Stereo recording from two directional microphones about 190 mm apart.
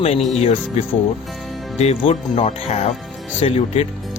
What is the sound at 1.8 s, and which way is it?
Speech, 35° left (ahead or behind).